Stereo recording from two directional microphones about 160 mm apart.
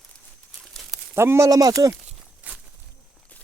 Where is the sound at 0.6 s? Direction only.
Centre (ahead or behind).